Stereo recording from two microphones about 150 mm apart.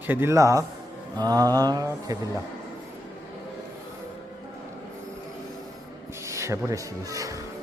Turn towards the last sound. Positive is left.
turn(degrees=-20)  # may be behind; listen again after turning